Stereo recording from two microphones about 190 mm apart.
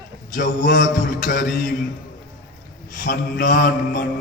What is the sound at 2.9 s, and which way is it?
A man's voice, 45° left (ahead or behind).